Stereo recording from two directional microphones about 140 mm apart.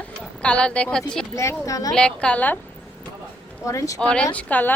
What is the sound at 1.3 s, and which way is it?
Speech, 20° left (ahead or behind).